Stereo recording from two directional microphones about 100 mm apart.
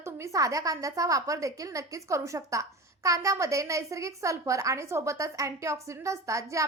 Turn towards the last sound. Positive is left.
turn(degrees=-30)  # may be behind; listen again after turning